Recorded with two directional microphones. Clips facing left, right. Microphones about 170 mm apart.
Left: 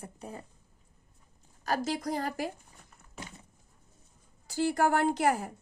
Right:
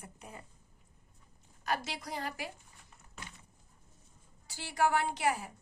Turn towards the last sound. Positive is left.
turn(degrees=50)  # may be behind; listen again after turning